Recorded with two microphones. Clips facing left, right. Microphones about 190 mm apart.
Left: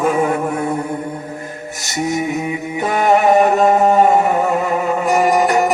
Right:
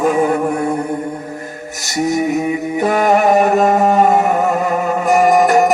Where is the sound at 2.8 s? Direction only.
45° right (ahead or behind).